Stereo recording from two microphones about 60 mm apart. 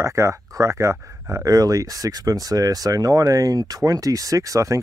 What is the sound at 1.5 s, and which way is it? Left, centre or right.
Speech, right.